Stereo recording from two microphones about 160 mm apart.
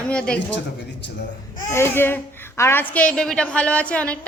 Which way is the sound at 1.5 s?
20° left (ahead or behind).